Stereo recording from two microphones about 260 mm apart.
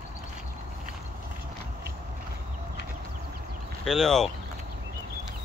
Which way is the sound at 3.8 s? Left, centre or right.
Centre.